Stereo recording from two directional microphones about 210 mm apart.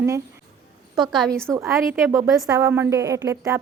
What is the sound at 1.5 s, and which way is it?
A woman's voice, 15° right (ahead or behind).